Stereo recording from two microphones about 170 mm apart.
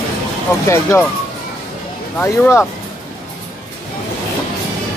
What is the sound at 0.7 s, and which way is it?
Speech, 15° left (ahead or behind).